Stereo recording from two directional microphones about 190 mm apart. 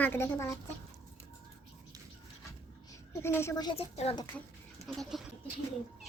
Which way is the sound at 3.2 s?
15° left (ahead or behind).